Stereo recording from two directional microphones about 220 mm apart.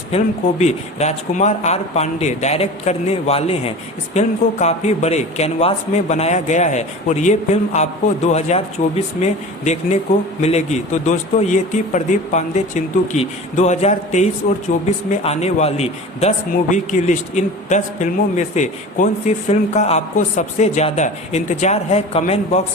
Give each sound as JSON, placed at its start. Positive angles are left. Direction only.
{"t": 0.6, "sound": "speech", "side_deg": 30}